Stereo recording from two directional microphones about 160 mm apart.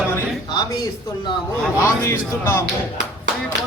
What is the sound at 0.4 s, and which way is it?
Speech, 25° left (ahead or behind).